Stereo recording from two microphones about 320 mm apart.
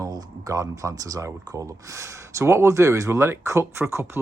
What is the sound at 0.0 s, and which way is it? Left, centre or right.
Speech, centre.